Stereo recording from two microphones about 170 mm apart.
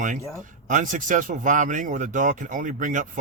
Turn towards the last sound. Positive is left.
turn(degrees=-50)  # may be behind; listen again after turning